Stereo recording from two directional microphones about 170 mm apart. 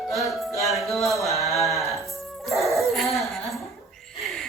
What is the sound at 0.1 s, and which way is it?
Music, centre (ahead or behind).